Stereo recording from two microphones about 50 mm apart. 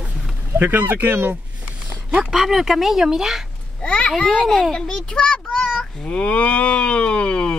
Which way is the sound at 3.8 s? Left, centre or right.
Left.